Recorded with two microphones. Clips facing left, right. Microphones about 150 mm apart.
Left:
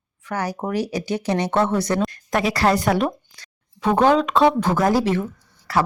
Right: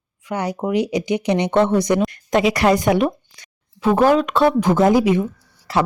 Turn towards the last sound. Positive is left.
turn(degrees=-25)  # may be behind; listen again after turning